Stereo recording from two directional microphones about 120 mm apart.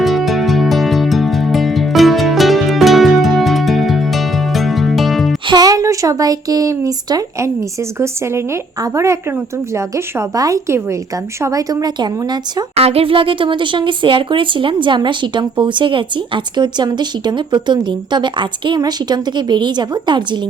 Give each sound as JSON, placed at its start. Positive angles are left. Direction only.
{"t": 0.0, "sound": "music", "side_deg": 0}
{"t": 5.5, "sound": "a woman's voice", "side_deg": -35}
{"t": 12.7, "sound": "speech", "side_deg": -55}